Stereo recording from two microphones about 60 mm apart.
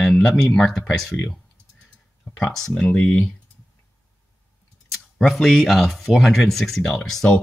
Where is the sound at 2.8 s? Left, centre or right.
Left.